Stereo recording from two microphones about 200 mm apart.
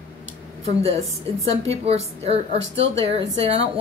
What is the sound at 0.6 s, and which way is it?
A woman's voice, 30° right (ahead or behind).